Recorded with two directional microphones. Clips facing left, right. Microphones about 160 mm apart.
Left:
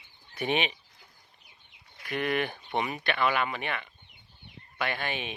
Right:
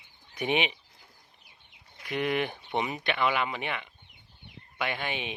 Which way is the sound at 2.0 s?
20° right (ahead or behind).